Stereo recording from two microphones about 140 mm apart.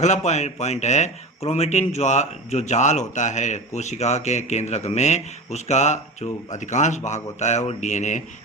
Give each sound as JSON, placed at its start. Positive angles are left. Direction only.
{"t": 0.0, "sound": "a man's voice", "side_deg": 55}